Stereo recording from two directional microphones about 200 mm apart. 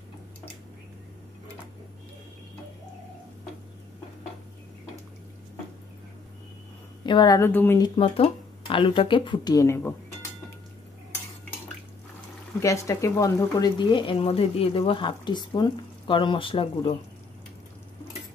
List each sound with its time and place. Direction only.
7.1 s a woman's voice: 20° left (ahead or behind)
7.8 s speech: 25° left (ahead or behind)
12.6 s speech: 15° left (ahead or behind)